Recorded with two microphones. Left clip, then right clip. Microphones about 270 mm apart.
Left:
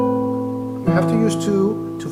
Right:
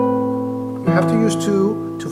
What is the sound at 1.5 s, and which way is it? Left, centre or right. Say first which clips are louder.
Speech: even; centre.